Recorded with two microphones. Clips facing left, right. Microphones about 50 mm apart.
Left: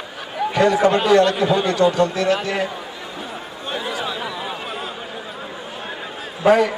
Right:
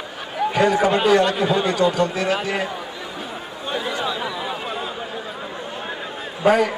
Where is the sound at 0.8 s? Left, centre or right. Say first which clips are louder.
Left 2 dB; centre.